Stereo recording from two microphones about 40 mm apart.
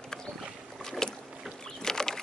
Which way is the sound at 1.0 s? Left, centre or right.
Centre.